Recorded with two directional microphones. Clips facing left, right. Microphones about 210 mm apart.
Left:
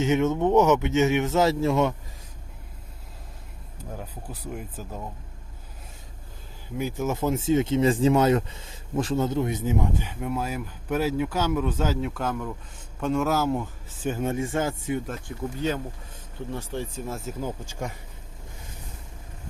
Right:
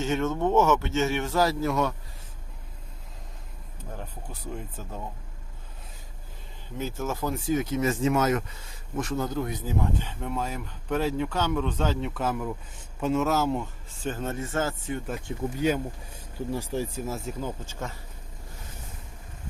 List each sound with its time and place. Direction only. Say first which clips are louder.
0.0 s speech: left 4 dB; 20° left (ahead or behind)
4.5 s speech: left 1 dB; 5° left (ahead or behind)
6.7 s speech: left 4 dB; 15° left (ahead or behind)
10.0 s speech: left 2 dB; 10° left (ahead or behind)
15.5 s speech: right 3 dB; 10° right (ahead or behind)
17.7 s speech: left 3 dB; 15° left (ahead or behind)